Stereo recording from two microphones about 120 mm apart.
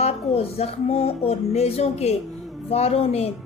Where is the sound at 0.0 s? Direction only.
55° left (ahead or behind).